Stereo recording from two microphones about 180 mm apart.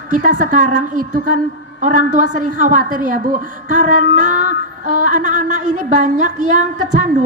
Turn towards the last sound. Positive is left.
turn(degrees=-45)  # may be behind; listen again after turning